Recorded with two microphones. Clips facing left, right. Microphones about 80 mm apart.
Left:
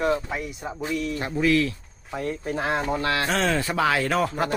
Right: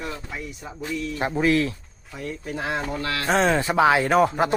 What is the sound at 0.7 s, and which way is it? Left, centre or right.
Speech, left.